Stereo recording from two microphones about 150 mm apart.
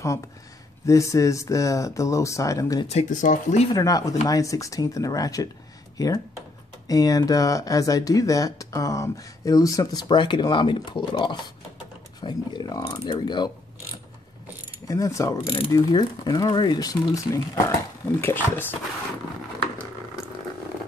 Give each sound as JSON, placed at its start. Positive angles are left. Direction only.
{"t": 0.8, "sound": "speech", "side_deg": 20}
{"t": 2.9, "sound": "speech", "side_deg": 50}
{"t": 3.7, "sound": "speech", "side_deg": 25}
{"t": 14.9, "sound": "speech", "side_deg": 20}
{"t": 15.3, "sound": "speech", "side_deg": 35}